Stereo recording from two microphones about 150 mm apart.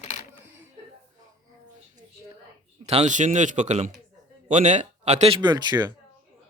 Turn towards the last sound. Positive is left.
turn(degrees=-25)  # may be behind; listen again after turning